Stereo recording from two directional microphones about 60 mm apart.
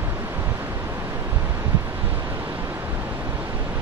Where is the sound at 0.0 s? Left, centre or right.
Right.